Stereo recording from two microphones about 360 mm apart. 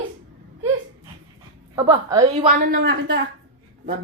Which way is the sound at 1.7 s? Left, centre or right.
Centre.